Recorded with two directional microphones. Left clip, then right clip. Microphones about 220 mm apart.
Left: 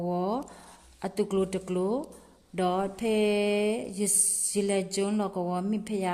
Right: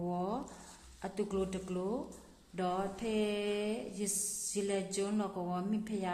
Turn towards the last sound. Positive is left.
turn(degrees=40)  # may be behind; listen again after turning